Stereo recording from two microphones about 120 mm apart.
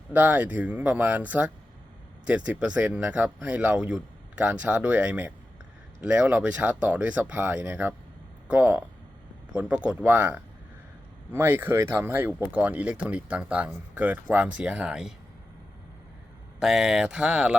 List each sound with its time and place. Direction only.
0.1 s speech: 15° right (ahead or behind)
16.6 s speech: 5° right (ahead or behind)